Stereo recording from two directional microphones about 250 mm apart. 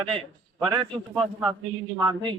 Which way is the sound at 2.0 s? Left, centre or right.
Centre.